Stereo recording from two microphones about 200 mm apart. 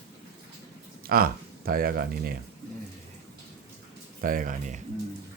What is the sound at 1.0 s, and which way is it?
Speech, 50° right (ahead or behind).